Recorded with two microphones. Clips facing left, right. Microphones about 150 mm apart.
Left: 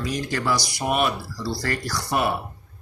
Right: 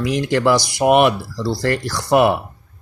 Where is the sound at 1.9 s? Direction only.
65° right (ahead or behind).